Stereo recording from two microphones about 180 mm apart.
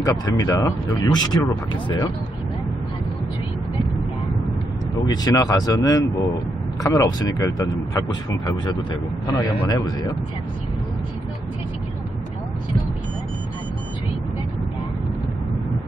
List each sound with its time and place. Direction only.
0.0 s speech: 20° left (ahead or behind)
5.1 s speech: 20° left (ahead or behind)
9.3 s speech: 20° left (ahead or behind)